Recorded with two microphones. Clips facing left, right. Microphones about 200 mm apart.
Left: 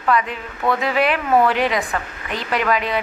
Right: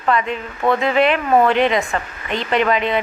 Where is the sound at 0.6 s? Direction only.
20° right (ahead or behind).